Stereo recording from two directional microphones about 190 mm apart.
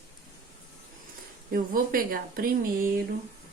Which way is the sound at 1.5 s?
50° right (ahead or behind).